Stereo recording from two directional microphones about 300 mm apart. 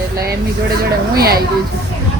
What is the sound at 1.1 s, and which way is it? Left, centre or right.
Speech, right.